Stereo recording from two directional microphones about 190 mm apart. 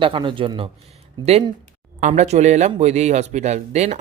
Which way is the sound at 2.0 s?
40° right (ahead or behind).